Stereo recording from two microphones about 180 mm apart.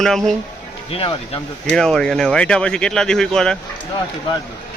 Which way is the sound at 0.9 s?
30° left (ahead or behind).